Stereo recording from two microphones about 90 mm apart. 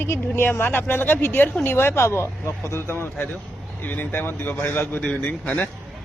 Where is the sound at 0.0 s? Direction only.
25° left (ahead or behind).